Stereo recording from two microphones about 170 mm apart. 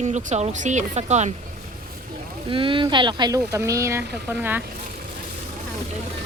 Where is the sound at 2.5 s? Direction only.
30° right (ahead or behind); by 4.6 s 10° right (ahead or behind).